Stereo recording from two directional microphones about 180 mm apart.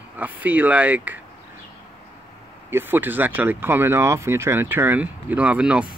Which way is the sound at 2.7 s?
10° right (ahead or behind).